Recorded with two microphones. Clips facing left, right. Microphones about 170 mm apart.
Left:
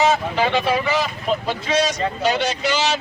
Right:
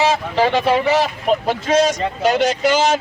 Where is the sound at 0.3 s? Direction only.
40° right (ahead or behind).